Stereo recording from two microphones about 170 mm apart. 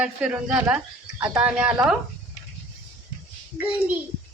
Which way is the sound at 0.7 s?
10° right (ahead or behind).